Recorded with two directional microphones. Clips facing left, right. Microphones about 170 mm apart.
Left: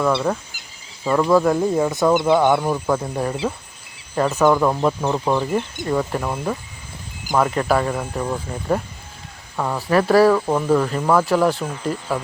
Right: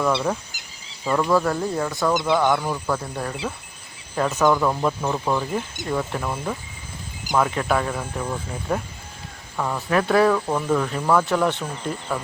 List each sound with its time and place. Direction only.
0.0 s speech: centre (ahead or behind); by 3.3 s 15° left (ahead or behind)
4.4 s speech: 15° left (ahead or behind)